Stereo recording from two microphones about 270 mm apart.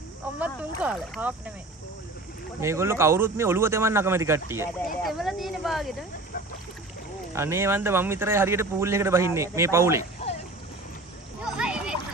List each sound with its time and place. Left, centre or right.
0.4 s speech: centre
2.6 s a man's voice: centre
7.3 s a man's voice: centre
11.4 s a sound: centre